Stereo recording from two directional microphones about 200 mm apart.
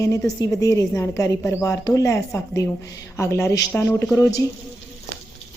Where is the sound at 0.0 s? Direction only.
15° left (ahead or behind).